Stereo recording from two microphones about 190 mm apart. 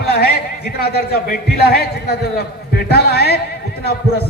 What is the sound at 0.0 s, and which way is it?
A man's voice, 55° left (ahead or behind).